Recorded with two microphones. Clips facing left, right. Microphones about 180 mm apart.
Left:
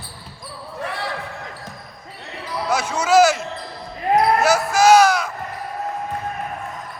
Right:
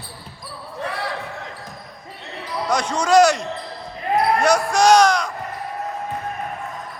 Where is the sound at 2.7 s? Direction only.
5° left (ahead or behind).